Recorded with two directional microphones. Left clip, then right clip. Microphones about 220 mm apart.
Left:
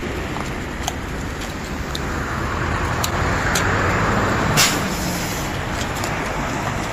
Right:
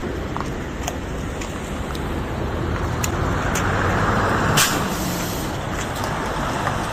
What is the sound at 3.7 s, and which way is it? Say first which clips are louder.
Vehicle: left 1 dB; 45° left (ahead or behind).